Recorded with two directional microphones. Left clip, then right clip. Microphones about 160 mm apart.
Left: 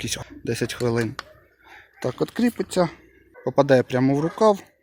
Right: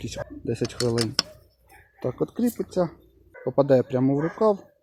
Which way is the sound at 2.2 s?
10° left (ahead or behind).